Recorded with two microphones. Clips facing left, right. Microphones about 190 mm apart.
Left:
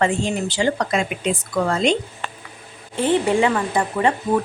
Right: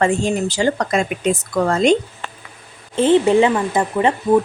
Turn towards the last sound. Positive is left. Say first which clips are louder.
# right 2 dB
turn(degrees=-20)  # may be behind; listen again after turning